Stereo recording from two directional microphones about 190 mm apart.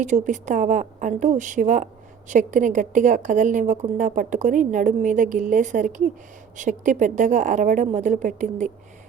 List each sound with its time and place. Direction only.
0.0 s a woman's voice: 40° right (ahead or behind)